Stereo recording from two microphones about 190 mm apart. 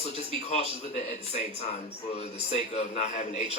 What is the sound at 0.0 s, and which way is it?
Speech, 35° left (ahead or behind).